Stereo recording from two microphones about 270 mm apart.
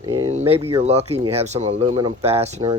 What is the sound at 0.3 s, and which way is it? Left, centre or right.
Speech, right.